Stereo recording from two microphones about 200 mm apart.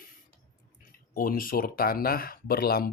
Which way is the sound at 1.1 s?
45° left (ahead or behind).